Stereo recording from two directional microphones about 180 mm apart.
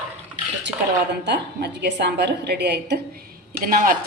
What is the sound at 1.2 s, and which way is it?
Speech, 70° right (ahead or behind).